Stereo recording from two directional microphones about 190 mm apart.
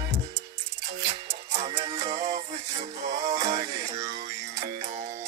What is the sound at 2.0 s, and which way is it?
Music, 35° right (ahead or behind).